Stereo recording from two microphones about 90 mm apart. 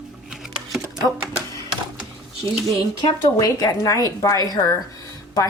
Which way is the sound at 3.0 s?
40° left (ahead or behind).